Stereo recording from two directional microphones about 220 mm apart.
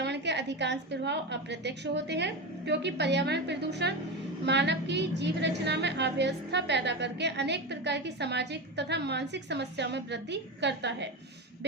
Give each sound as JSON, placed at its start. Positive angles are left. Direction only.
{"t": 0.0, "sound": "a woman's voice", "side_deg": -50}